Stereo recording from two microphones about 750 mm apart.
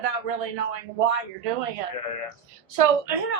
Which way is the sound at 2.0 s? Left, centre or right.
Left.